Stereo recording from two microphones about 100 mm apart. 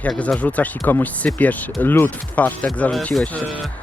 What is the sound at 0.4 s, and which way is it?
Speech, 15° left (ahead or behind).